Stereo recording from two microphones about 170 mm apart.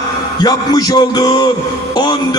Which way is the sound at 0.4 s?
25° left (ahead or behind).